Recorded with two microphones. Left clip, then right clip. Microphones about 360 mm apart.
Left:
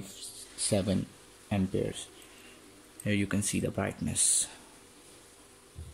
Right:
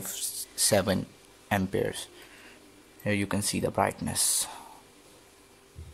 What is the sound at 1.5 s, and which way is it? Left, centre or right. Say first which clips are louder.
Speech: right 5 dB; right.